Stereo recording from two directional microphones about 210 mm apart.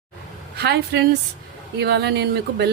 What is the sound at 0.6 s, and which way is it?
A woman's voice, 50° right (ahead or behind).